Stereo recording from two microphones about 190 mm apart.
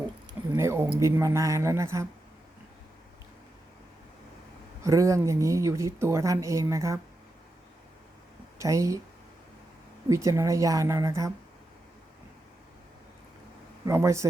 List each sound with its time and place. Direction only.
0.5 s speech: 15° right (ahead or behind)
4.8 s a woman's voice: 15° right (ahead or behind)
8.5 s speech: 15° right (ahead or behind)
10.1 s a woman's voice: 15° right (ahead or behind)
13.8 s a woman's voice: 15° right (ahead or behind)